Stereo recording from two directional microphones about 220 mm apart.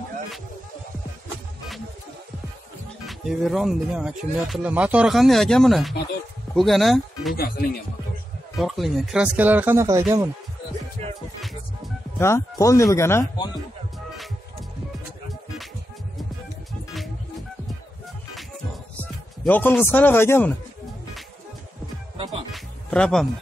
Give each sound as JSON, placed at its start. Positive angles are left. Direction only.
{"t": 3.1, "sound": "speech", "side_deg": 0}
{"t": 7.3, "sound": "speech", "side_deg": 45}
{"t": 8.5, "sound": "speech", "side_deg": 0}
{"t": 12.2, "sound": "speech", "side_deg": 10}
{"t": 19.4, "sound": "speech", "side_deg": 10}
{"t": 22.1, "sound": "music", "side_deg": -25}
{"t": 22.5, "sound": "music", "side_deg": 5}